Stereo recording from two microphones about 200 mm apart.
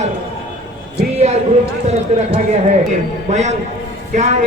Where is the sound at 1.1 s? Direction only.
30° right (ahead or behind).